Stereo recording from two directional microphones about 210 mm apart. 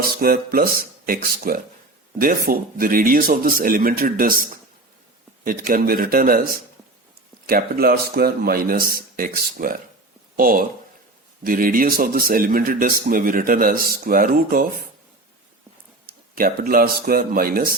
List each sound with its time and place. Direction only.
0.0 s speech: 45° right (ahead or behind)
5.5 s speech: 40° right (ahead or behind)
16.0 s speech: 45° right (ahead or behind)